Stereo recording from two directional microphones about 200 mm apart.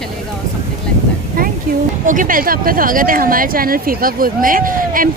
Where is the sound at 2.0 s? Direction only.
40° right (ahead or behind).